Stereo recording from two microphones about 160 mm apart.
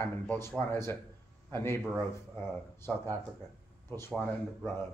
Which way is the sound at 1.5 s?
15° left (ahead or behind).